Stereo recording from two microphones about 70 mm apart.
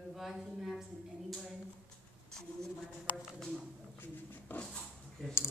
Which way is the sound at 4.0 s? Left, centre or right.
Left.